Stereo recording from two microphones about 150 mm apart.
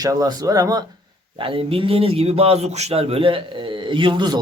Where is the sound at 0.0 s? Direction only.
25° right (ahead or behind).